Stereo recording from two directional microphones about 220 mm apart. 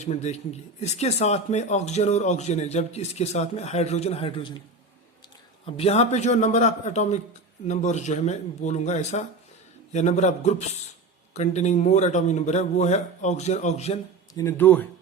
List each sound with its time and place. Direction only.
0.0 s speech: 30° left (ahead or behind)
5.6 s speech: 25° left (ahead or behind)
14.3 s speech: 10° left (ahead or behind)